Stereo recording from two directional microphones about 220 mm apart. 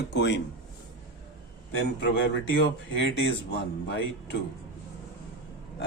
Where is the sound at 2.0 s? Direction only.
50° left (ahead or behind).